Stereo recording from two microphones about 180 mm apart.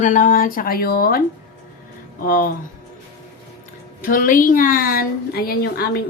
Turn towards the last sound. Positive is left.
turn(degrees=60)  # may be behind; listen again after turning